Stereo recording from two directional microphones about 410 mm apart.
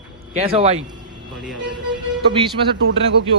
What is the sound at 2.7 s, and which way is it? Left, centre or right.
Speech, right.